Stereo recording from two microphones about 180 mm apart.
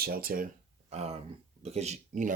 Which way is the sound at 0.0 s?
55° right (ahead or behind).